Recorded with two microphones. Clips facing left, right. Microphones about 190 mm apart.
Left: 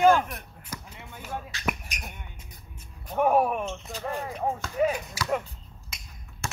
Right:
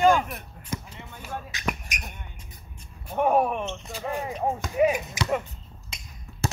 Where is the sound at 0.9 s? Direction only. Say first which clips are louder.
Right 2 dB; 10° left (ahead or behind).